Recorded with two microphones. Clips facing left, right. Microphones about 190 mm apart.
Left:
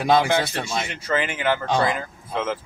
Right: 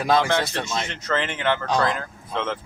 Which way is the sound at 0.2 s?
10° left (ahead or behind).